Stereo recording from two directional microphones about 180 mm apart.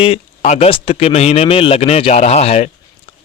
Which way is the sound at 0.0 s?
35° left (ahead or behind).